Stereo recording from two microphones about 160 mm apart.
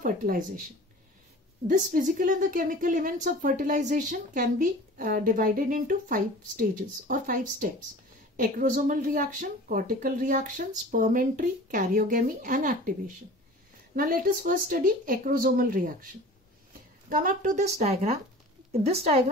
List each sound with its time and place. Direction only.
0.0 s speech: 60° right (ahead or behind)
1.7 s a woman's voice: 55° right (ahead or behind)
17.1 s a woman's voice: 55° right (ahead or behind); by 19.2 s 40° right (ahead or behind)